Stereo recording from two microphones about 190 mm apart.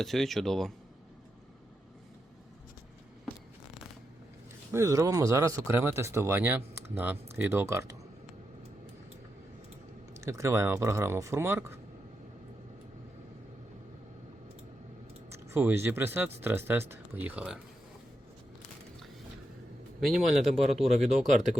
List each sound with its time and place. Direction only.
0.0 s speech: centre (ahead or behind)
4.7 s speech: 15° right (ahead or behind)
10.2 s speech: 15° right (ahead or behind)
15.3 s speech: 10° right (ahead or behind)
20.0 s speech: centre (ahead or behind)
20.9 s speech: 35° right (ahead or behind)